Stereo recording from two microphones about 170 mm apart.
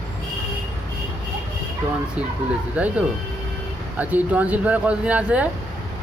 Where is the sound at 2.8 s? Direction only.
10° right (ahead or behind).